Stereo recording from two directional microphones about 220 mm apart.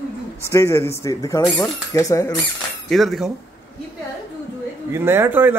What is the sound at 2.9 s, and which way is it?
Speech, centre (ahead or behind).